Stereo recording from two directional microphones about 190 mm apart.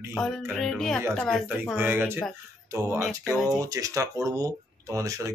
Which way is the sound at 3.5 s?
20° right (ahead or behind).